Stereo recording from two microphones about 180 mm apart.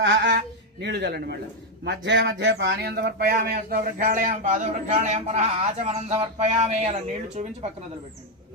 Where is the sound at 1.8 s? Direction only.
75° right (ahead or behind); by 7.5 s 40° right (ahead or behind).